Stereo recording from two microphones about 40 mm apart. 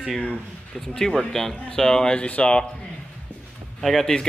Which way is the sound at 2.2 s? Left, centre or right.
Left.